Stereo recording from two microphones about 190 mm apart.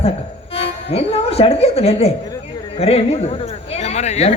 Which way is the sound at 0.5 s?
30° left (ahead or behind).